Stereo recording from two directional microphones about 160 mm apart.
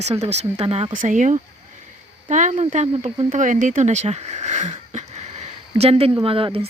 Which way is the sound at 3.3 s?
50° right (ahead or behind).